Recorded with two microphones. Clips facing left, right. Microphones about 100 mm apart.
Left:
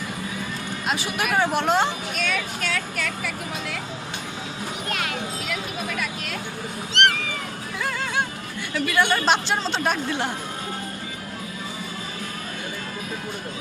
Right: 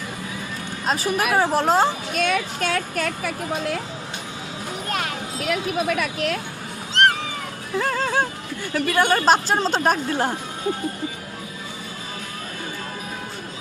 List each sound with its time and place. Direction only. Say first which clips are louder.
0.9 s speech: right 4 dB; 40° right (ahead or behind)
5.4 s speech: right 6 dB; 55° right (ahead or behind)
7.0 s cat: right 3 dB; 35° right (ahead or behind)
7.8 s music: right 5 dB; 35° right (ahead or behind)
8.7 s speech: right 2 dB; 45° right (ahead or behind)